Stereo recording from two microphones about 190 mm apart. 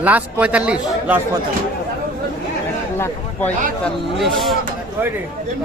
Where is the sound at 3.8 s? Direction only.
Centre (ahead or behind).